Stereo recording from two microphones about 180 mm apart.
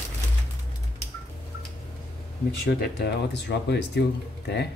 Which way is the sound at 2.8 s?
65° left (ahead or behind).